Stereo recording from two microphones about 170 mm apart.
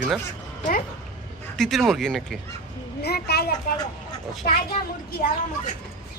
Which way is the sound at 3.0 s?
70° left (ahead or behind).